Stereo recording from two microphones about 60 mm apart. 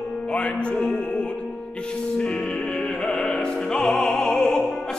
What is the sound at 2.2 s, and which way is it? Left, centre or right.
Music, centre.